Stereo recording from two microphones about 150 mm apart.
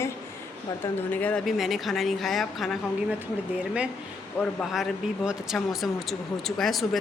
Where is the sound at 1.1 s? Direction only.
10° left (ahead or behind).